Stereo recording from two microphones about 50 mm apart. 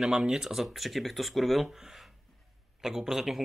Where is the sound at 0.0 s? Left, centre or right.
Centre.